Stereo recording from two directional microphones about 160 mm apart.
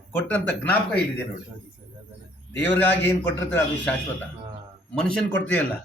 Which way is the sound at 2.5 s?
10° left (ahead or behind).